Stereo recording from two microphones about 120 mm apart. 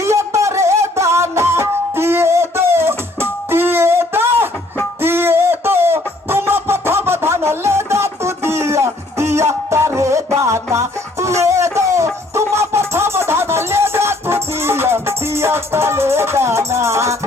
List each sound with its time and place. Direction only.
0.0 s music: 25° right (ahead or behind)